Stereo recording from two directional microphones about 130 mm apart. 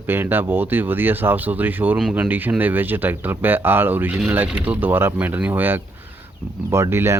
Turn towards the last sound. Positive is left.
turn(degrees=-20)  # may be behind; listen again after turning